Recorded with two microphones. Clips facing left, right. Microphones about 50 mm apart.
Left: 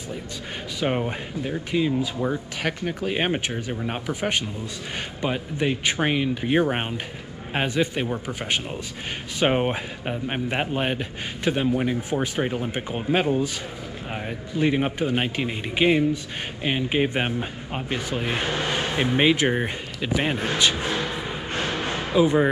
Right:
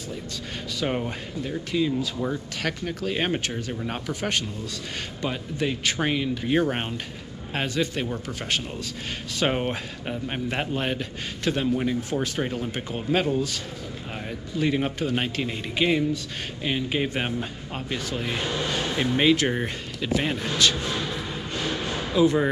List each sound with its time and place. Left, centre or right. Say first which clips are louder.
0.7 s speech: left 3 dB; centre
21.6 s a sound: even; left
22.1 s speech: left 2 dB; centre